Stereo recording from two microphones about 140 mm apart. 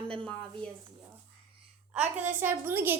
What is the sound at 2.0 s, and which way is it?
Speech, 60° right (ahead or behind).